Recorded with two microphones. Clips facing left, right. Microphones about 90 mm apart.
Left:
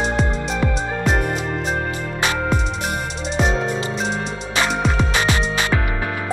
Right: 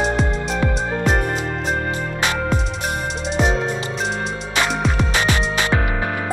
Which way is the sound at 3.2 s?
Centre (ahead or behind).